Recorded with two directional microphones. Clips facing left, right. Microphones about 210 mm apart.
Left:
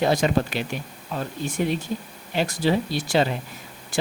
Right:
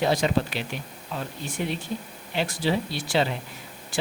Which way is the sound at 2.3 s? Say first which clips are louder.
Left 3 dB; 45° left (ahead or behind).